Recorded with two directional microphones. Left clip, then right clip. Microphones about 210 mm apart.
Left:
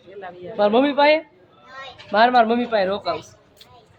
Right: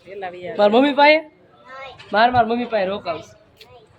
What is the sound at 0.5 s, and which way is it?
A woman's voice, 10° right (ahead or behind).